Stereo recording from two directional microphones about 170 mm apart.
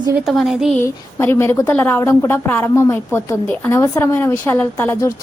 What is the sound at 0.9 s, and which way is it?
A woman's voice, 15° left (ahead or behind).